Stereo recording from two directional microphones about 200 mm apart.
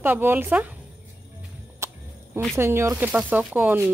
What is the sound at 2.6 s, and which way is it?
Speech, 15° right (ahead or behind).